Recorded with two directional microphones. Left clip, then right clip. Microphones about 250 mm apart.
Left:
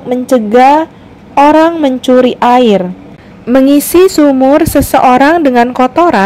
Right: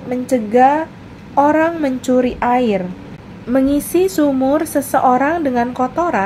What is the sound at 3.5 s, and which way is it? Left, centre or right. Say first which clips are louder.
A woman's voice: left 9 dB; left.